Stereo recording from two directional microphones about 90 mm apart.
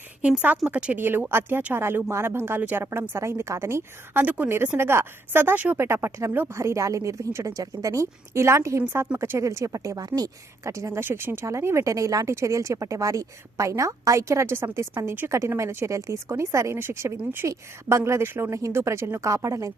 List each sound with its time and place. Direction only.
0.2 s a woman's voice: 15° right (ahead or behind)
1.3 s a woman's voice: 25° right (ahead or behind)
9.5 s speech: 35° right (ahead or behind)